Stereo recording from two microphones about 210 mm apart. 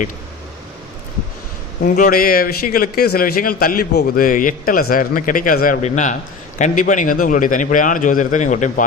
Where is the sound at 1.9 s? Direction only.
40° left (ahead or behind).